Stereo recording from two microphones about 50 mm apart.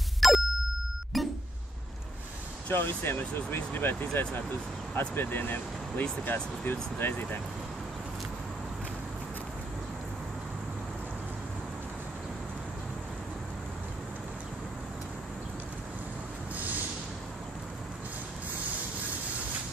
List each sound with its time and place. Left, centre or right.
0.2 s ding: centre
1.1 s a sound: centre
2.7 s speech: left